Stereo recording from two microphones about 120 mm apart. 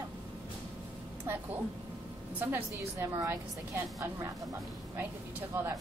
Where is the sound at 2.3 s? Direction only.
20° right (ahead or behind).